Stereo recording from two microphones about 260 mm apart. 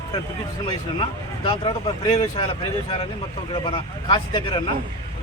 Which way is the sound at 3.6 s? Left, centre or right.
Centre.